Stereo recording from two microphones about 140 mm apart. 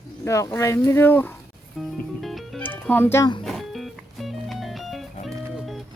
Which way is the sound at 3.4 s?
Centre (ahead or behind).